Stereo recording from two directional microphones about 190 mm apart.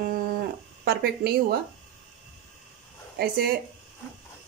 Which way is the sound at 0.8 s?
55° right (ahead or behind).